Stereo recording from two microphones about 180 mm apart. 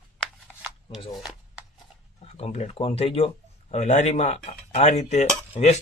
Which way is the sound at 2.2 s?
35° left (ahead or behind).